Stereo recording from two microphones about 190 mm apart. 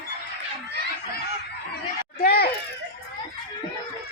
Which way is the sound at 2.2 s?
55° left (ahead or behind).